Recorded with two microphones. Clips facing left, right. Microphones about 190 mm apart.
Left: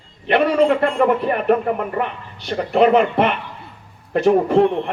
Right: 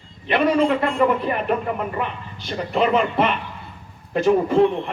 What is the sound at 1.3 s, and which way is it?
Speech, 50° left (ahead or behind).